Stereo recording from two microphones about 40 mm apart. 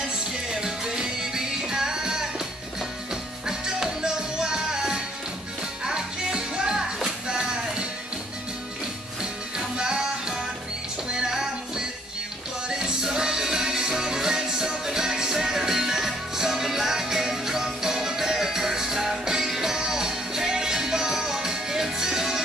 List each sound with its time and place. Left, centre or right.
0.6 s music: centre
3.4 s music: centre
9.8 s music: centre